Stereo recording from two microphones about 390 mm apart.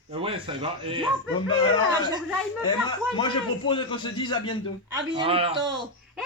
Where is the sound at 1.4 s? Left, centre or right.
Centre.